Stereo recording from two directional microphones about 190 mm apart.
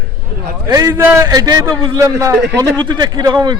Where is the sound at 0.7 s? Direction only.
15° right (ahead or behind).